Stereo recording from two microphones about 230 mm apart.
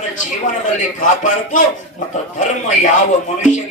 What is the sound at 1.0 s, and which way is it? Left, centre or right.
Speech, left.